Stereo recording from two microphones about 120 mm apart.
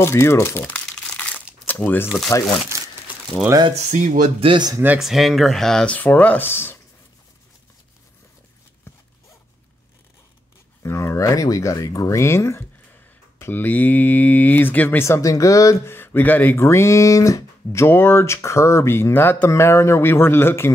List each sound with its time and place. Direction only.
0.0 s crumpling: 20° left (ahead or behind)
2.7 s crumpling: 25° right (ahead or behind)
3.7 s speech: 90° right
4.4 s speech: 50° right (ahead or behind)
4.8 s speech: 5° right (ahead or behind); by 6.8 s 20° left (ahead or behind)
10.8 s speech: 20° left (ahead or behind)